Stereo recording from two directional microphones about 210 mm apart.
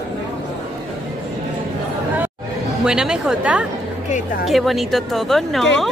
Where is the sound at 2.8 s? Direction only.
5° right (ahead or behind).